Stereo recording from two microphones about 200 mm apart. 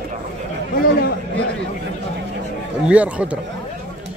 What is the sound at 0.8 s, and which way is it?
Speech, 50° left (ahead or behind).